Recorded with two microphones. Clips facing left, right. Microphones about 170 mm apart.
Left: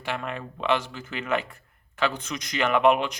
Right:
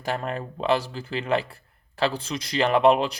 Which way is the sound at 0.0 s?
40° right (ahead or behind).